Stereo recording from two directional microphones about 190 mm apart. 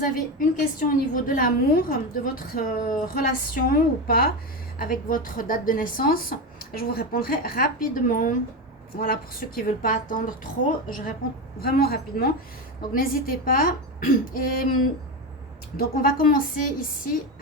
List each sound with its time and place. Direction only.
0.0 s a woman's voice: 45° left (ahead or behind)
15.8 s a woman's voice: 50° left (ahead or behind)